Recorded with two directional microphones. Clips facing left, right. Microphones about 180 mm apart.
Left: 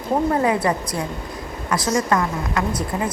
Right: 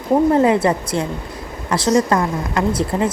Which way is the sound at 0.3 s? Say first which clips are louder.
Right 5 dB; 25° right (ahead or behind).